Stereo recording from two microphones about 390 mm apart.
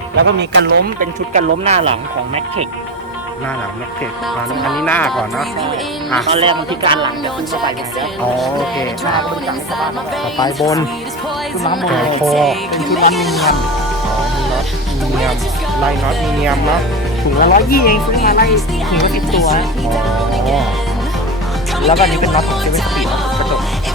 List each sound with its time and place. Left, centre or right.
0.2 s speech: right
4.6 s speech: centre
6.2 s speech: centre
8.4 s speech: centre
10.6 s speech: centre
17.4 s speech: left
18.5 s speech: centre
19.9 s music: centre
21.8 s speech: centre